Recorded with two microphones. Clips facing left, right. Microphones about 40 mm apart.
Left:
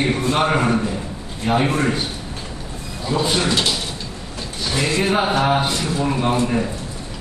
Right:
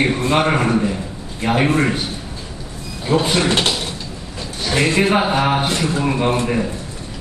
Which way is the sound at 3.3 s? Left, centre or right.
Right.